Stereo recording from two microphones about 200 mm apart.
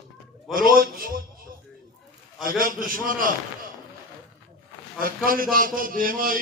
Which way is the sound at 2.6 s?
45° right (ahead or behind).